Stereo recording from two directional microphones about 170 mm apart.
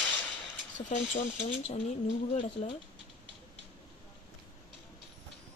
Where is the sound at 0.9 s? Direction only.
45° left (ahead or behind).